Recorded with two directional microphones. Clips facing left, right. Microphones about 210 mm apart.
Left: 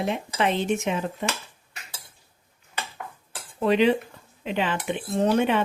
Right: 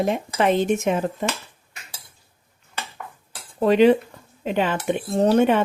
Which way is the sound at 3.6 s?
45° right (ahead or behind).